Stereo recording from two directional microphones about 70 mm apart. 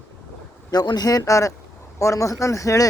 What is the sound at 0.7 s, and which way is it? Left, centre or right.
Speech, left.